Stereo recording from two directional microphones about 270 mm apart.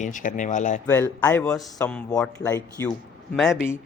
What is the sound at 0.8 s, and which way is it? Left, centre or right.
A man's voice, centre.